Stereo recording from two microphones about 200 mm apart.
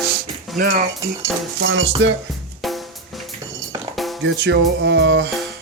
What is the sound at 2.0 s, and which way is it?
Music, 60° right (ahead or behind).